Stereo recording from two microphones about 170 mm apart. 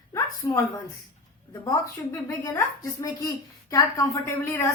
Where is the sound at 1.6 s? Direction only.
20° left (ahead or behind).